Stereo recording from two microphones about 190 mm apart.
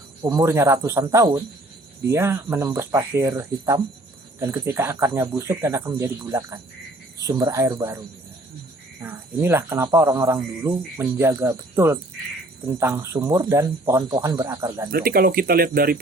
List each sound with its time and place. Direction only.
0.2 s speech: 15° right (ahead or behind)
14.8 s speech: 50° right (ahead or behind)